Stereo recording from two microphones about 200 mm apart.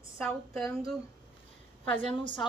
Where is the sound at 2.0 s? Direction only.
25° left (ahead or behind).